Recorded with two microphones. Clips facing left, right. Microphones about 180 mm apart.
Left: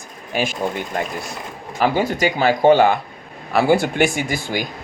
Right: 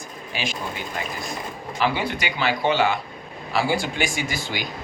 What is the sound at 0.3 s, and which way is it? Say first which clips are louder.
Speech: left 8 dB; 50° left (ahead or behind).